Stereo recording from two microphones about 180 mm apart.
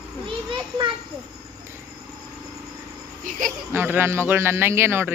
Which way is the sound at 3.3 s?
50° right (ahead or behind).